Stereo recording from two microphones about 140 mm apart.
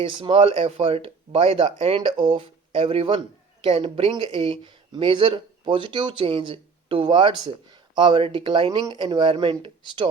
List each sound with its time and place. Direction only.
0.0 s speech: 35° right (ahead or behind)